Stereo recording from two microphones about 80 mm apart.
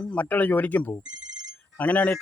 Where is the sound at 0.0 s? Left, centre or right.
Centre.